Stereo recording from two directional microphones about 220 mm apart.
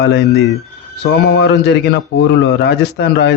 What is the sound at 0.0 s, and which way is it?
A man's voice, 50° left (ahead or behind).